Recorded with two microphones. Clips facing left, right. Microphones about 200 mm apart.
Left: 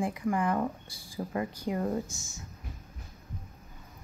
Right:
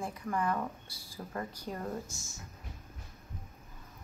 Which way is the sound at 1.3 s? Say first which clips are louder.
Left 6 dB; 10° left (ahead or behind).